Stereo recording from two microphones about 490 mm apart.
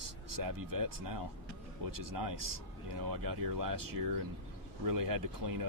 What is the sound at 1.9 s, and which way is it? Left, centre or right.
Speech, right.